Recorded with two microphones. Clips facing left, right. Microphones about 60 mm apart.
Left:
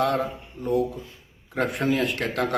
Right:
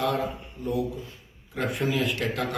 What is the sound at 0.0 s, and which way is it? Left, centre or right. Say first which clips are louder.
A man's voice: left 3 dB; left.